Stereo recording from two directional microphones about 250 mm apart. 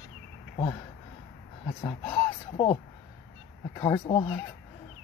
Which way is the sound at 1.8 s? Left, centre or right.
Centre.